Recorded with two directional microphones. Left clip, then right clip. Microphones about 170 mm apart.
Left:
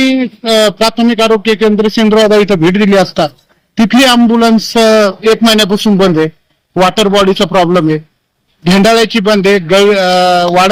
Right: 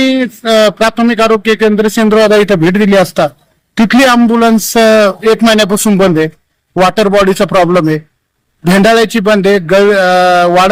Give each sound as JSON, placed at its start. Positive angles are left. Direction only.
{"t": 0.0, "sound": "a man's voice", "side_deg": -15}